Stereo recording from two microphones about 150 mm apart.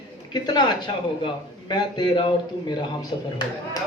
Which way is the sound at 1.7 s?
30° left (ahead or behind).